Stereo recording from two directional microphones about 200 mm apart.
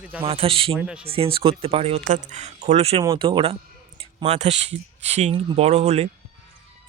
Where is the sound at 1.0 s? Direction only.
30° right (ahead or behind).